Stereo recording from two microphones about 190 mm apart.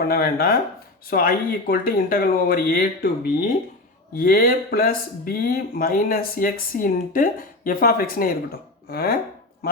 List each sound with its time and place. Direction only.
0.1 s speech: 55° left (ahead or behind)
4.2 s speech: 50° left (ahead or behind)
8.9 s chopping: 55° left (ahead or behind)